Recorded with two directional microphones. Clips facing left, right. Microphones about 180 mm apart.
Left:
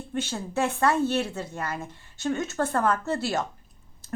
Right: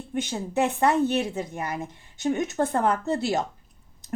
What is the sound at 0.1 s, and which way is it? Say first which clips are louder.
A woman's voice: right 2 dB; 15° right (ahead or behind).